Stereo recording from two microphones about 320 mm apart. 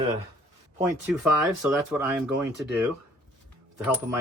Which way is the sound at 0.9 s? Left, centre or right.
Centre.